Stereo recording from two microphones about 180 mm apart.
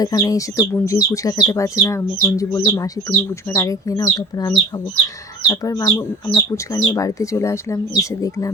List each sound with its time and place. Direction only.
0.0 s speech: 20° left (ahead or behind)